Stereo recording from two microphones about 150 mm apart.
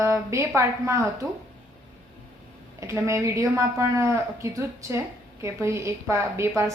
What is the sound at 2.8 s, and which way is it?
A woman's voice, 20° right (ahead or behind).